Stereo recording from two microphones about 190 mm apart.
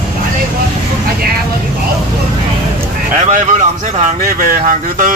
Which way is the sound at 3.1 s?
40° right (ahead or behind).